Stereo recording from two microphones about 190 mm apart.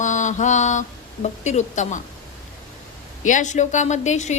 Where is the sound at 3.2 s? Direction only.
40° left (ahead or behind).